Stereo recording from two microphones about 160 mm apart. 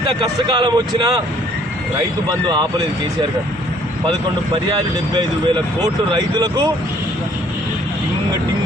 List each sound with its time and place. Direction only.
0.2 s speech: 25° right (ahead or behind)
5.1 s speech: 25° right (ahead or behind)